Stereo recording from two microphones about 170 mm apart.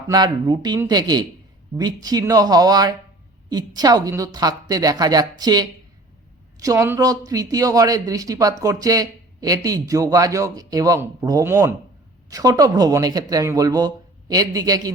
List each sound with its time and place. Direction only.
0.1 s speech: 25° right (ahead or behind)